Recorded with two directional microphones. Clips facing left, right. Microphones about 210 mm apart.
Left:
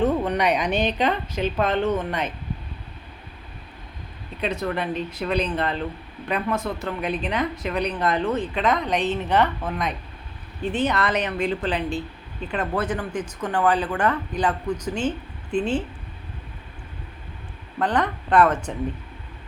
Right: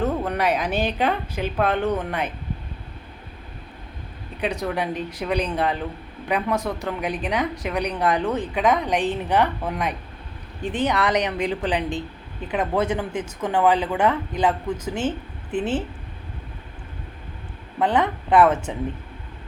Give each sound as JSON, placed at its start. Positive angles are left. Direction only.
{"t": 0.0, "sound": "speech", "side_deg": -5}
{"t": 4.6, "sound": "speech", "side_deg": -10}
{"t": 15.5, "sound": "a woman's voice", "side_deg": -20}
{"t": 17.9, "sound": "speech", "side_deg": -10}